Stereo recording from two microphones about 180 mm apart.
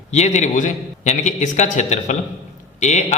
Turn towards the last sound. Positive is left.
turn(degrees=40)  # may be behind; listen again after turning